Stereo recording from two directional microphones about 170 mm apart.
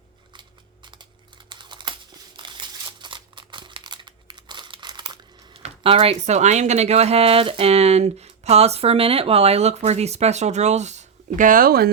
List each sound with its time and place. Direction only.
0.3 s scissors: 25° right (ahead or behind)
1.5 s crumpling: 25° right (ahead or behind)
5.5 s speech: 35° right (ahead or behind); by 11.9 s 60° right (ahead or behind)